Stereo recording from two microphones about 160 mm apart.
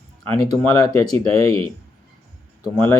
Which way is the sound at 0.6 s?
15° left (ahead or behind).